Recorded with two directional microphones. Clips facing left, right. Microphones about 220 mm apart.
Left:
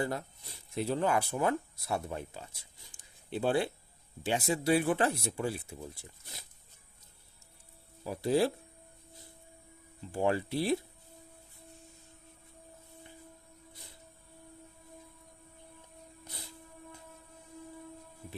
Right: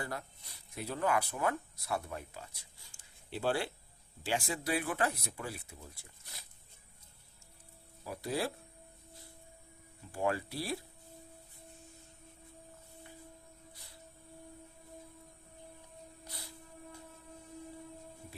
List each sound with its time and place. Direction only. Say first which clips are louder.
0.0 s speech: left 7 dB; 25° left (ahead or behind)
2.9 s a sound: left 5 dB; 20° left (ahead or behind)
4.2 s speech: left 5 dB; 20° left (ahead or behind)
8.0 s speech: left 8 dB; 25° left (ahead or behind)
10.1 s speech: left 4 dB; 25° left (ahead or behind)